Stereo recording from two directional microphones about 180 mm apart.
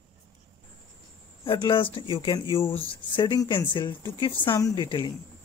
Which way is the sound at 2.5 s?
15° left (ahead or behind).